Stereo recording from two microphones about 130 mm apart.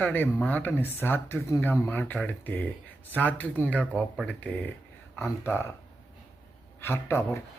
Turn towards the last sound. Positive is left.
turn(degrees=20)  # may be behind; listen again after turning